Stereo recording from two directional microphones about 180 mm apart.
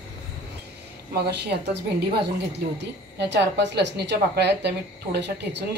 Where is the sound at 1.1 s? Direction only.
65° right (ahead or behind).